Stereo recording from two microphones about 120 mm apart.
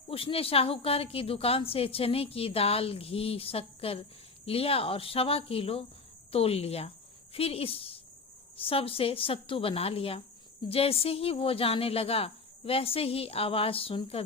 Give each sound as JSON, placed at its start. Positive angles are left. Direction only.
{"t": 0.1, "sound": "a woman's voice", "side_deg": 50}